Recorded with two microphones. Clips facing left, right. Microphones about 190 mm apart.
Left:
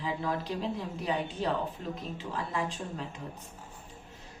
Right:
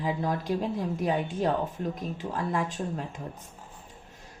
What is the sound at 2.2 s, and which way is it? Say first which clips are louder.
Speech: right 5 dB; 45° right (ahead or behind).